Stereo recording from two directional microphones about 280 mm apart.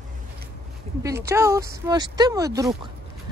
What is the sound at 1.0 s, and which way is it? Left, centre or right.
Speech, centre.